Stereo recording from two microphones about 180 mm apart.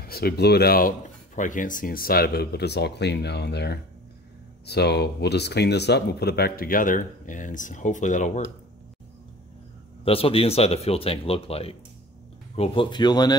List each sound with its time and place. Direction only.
0.0 s speech: 60° left (ahead or behind)
10.0 s speech: 30° left (ahead or behind)